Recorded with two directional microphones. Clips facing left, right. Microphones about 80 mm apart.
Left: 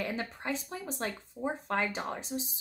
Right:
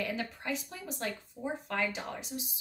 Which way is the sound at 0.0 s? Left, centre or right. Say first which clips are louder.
Left 1 dB; left.